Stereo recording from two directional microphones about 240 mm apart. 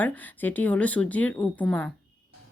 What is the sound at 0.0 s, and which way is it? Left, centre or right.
A woman's voice, centre.